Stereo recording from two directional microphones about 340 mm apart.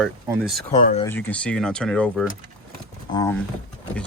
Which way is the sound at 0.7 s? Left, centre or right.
Left.